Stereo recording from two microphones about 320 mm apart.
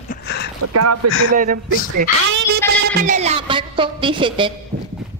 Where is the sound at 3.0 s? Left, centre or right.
Right.